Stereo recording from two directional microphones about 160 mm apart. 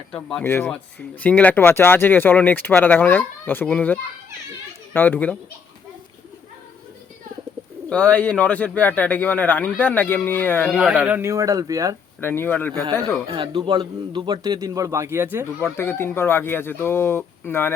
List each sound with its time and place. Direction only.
0.1 s speech: 5° left (ahead or behind)
7.9 s speech: 5° left (ahead or behind)
10.8 s speech: 5° right (ahead or behind); by 11.9 s 20° right (ahead or behind)
12.2 s speech: 15° left (ahead or behind)
13.3 s a man's voice: 30° right (ahead or behind); by 15.7 s 15° right (ahead or behind)
15.8 s speech: 15° left (ahead or behind)